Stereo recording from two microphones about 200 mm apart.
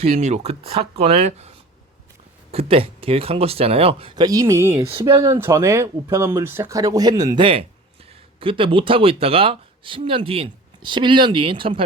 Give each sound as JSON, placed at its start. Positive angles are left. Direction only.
{"t": 0.1, "sound": "speech", "side_deg": -35}